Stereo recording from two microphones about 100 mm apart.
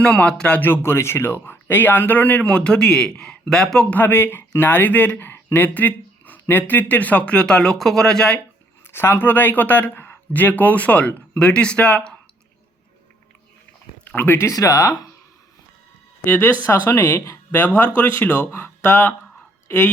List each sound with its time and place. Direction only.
0.0 s speech: 10° left (ahead or behind)
3.9 s speech: 20° left (ahead or behind)
8.9 s speech: 25° left (ahead or behind)
14.0 s speech: 20° left (ahead or behind); by 15.0 s 35° left (ahead or behind)
16.2 s speech: 25° left (ahead or behind)